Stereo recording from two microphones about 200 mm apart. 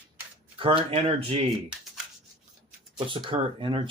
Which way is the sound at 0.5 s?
25° right (ahead or behind).